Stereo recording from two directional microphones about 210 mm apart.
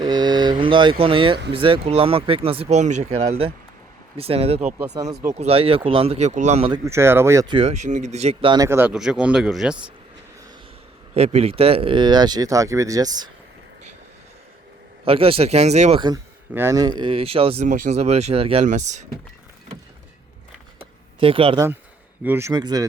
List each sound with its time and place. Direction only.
0.0 s a sound: 20° right (ahead or behind)
1.5 s speech: 25° right (ahead or behind)
6.8 s speech: 10° right (ahead or behind)
11.1 s speech: 30° right (ahead or behind)
15.0 s speech: 25° right (ahead or behind)
21.2 s speech: 25° right (ahead or behind)
22.2 s speech: 10° right (ahead or behind)